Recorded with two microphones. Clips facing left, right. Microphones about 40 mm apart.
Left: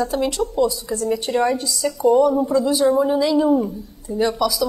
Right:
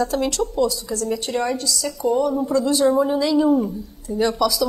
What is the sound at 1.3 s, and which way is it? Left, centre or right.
A woman's voice, centre.